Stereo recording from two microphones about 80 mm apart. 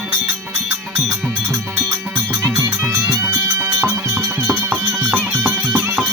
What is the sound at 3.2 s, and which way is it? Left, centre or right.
Music, right.